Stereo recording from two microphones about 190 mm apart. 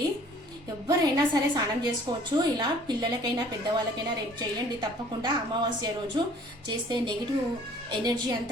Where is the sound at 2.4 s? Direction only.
20° right (ahead or behind).